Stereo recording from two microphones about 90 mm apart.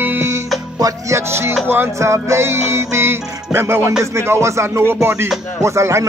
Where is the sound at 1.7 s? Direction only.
30° right (ahead or behind).